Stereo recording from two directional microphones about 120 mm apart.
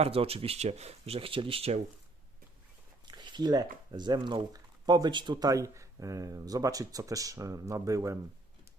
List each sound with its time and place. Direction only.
0.0 s speech: 55° right (ahead or behind)
3.1 s speech: 40° right (ahead or behind)